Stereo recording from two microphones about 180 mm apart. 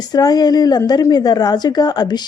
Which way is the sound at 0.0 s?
20° left (ahead or behind).